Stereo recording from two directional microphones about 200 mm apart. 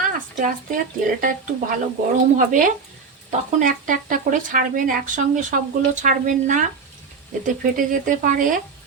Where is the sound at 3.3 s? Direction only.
40° right (ahead or behind).